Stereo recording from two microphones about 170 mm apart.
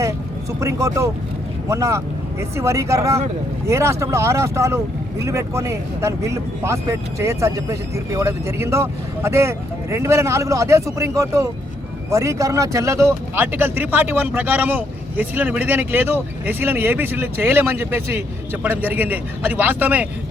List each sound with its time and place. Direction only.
0.6 s speech: 20° right (ahead or behind)